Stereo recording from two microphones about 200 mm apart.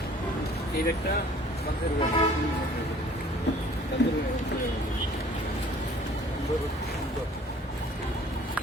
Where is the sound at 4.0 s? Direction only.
60° left (ahead or behind).